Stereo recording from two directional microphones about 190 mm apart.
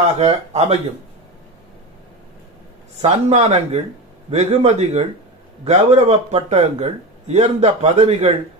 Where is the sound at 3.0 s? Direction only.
35° right (ahead or behind).